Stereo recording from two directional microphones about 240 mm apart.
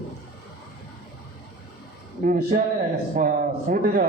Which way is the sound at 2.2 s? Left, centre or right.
Right.